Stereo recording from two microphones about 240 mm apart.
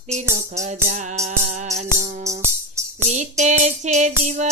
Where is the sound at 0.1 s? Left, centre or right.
Right.